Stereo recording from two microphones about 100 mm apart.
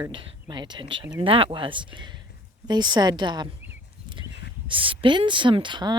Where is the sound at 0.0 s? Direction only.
55° right (ahead or behind).